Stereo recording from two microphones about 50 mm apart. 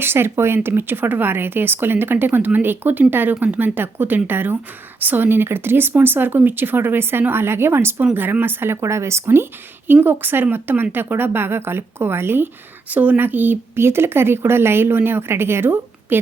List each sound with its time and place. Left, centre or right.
0.0 s speech: right
8.1 s speech: right
8.7 s speech: right
9.8 s speech: right
12.9 s speech: right
13.7 s speech: right